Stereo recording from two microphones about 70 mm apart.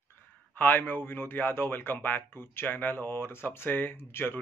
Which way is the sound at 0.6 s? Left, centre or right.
Left.